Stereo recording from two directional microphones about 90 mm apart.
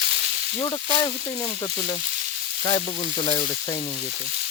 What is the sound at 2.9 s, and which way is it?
Frying, 75° left (ahead or behind).